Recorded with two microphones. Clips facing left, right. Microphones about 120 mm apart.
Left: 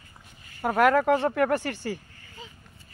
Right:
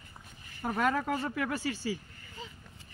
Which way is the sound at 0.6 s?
75° left (ahead or behind).